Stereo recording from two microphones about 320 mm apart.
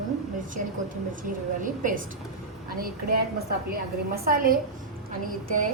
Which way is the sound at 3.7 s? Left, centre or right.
Right.